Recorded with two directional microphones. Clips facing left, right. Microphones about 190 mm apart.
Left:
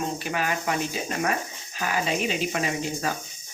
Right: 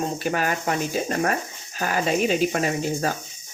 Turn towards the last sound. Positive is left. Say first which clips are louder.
# right 4 dB
turn(degrees=-40)  # may be behind; listen again after turning